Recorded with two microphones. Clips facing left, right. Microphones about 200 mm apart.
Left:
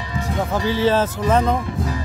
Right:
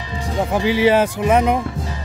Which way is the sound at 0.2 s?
15° right (ahead or behind).